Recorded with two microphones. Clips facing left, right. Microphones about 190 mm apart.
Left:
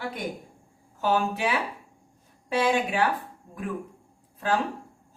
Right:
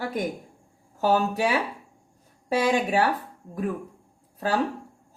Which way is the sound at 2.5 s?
40° right (ahead or behind).